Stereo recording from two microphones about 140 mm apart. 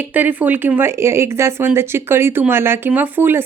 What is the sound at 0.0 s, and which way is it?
Speech, 10° right (ahead or behind).